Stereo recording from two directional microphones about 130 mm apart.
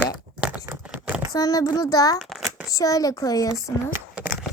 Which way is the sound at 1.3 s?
30° left (ahead or behind).